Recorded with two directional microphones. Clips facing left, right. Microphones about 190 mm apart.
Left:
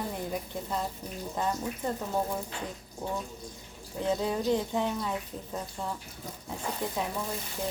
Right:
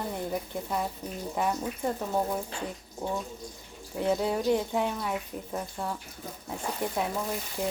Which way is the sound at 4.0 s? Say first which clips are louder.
Right 2 dB; 15° right (ahead or behind).